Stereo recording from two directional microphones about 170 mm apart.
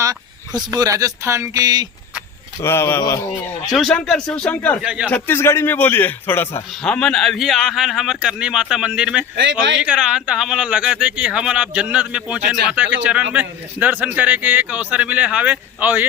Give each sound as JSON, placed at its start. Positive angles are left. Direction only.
{"t": 0.0, "sound": "speech", "side_deg": -20}
{"t": 2.6, "sound": "a man's voice", "side_deg": 15}
{"t": 3.7, "sound": "a man's voice", "side_deg": 0}
{"t": 4.8, "sound": "speech", "side_deg": -5}
{"t": 5.0, "sound": "a man's voice", "side_deg": 10}
{"t": 9.3, "sound": "speech", "side_deg": -90}
{"t": 9.8, "sound": "speech", "side_deg": -5}